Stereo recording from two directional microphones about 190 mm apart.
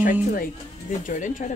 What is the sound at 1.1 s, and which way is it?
Speech, 40° left (ahead or behind).